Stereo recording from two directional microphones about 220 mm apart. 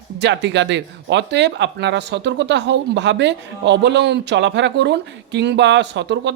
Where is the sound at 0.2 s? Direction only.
50° right (ahead or behind).